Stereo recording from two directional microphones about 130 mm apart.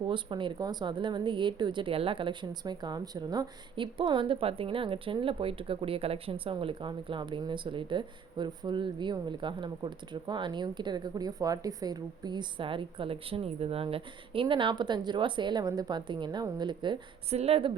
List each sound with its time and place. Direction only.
0.1 s speech: 40° right (ahead or behind)
17.2 s speech: 50° right (ahead or behind)